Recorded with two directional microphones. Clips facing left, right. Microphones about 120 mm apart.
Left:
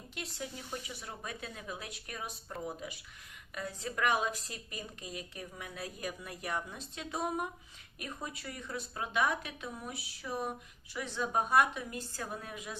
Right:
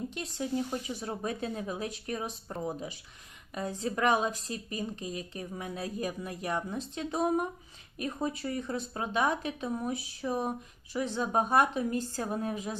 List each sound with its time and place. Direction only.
0.1 s speech: 30° right (ahead or behind)